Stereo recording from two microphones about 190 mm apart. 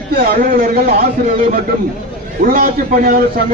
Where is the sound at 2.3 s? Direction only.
50° right (ahead or behind).